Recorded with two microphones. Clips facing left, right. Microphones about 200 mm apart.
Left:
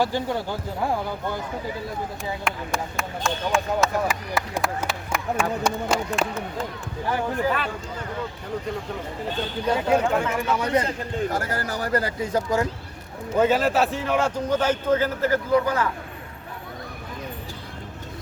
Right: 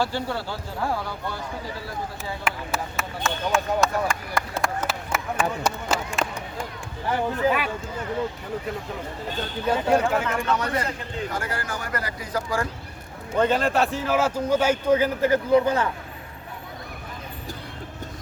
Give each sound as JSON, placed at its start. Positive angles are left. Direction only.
{"t": 0.0, "sound": "speech", "side_deg": 15}
{"t": 2.4, "sound": "a man's voice", "side_deg": -5}
{"t": 9.9, "sound": "speech", "side_deg": 0}
{"t": 11.3, "sound": "speech", "side_deg": 40}
{"t": 13.3, "sound": "a man's voice", "side_deg": 5}